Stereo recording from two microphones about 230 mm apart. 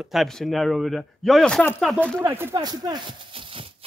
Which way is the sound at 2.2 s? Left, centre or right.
Centre.